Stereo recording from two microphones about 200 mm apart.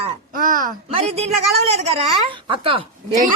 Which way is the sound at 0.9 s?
30° right (ahead or behind).